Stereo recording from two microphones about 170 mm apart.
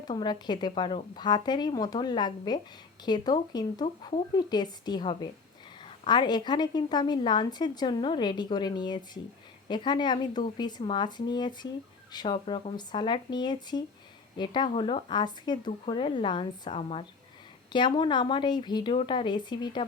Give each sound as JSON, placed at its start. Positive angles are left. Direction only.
{"t": 0.1, "sound": "a woman's voice", "side_deg": 25}